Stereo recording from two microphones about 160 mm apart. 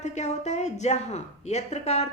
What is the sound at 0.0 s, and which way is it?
A woman's voice, 45° left (ahead or behind).